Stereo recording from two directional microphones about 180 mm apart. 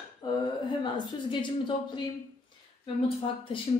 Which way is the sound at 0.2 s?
25° left (ahead or behind).